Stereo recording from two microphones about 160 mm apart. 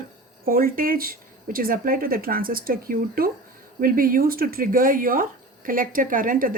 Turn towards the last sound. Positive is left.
turn(degrees=-60)  # may be behind; listen again after turning